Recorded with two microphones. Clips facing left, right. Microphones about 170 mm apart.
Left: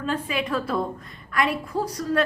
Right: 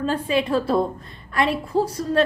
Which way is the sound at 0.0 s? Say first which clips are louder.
Right 5 dB; 30° right (ahead or behind).